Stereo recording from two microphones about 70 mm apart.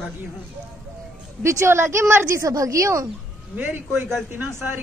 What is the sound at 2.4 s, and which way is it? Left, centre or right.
Speech, right.